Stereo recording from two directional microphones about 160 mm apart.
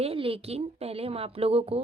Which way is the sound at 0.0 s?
35° right (ahead or behind).